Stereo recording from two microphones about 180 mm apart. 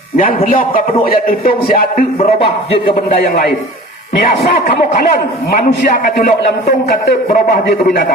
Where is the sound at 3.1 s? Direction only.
55° left (ahead or behind).